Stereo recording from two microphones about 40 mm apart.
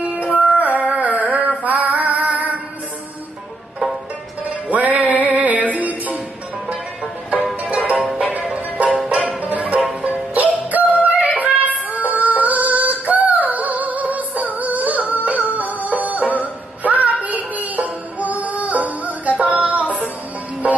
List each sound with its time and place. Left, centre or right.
0.0 s music: right
4.5 s music: right
7.6 s music: right
11.1 s female singing: right
17.2 s music: right